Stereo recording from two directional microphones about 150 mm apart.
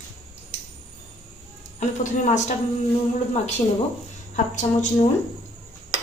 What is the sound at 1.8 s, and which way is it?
Speech, 50° left (ahead or behind).